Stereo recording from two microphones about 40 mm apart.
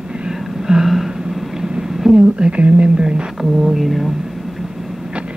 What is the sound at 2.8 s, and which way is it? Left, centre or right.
Speech, right.